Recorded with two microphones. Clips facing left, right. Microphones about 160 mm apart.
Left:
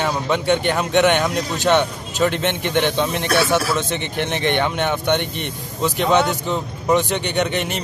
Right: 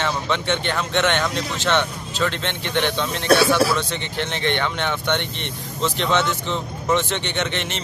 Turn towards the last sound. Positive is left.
turn(degrees=10)  # may be behind; listen again after turning